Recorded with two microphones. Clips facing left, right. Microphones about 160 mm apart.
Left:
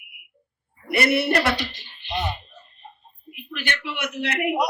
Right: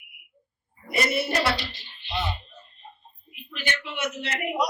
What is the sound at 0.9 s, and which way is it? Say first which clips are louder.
Speech: left 5 dB; 65° left (ahead or behind).